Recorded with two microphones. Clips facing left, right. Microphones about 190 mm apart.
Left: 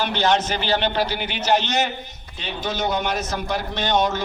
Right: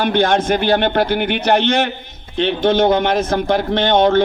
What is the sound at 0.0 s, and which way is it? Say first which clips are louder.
A man's voice: right 5 dB; 55° right (ahead or behind).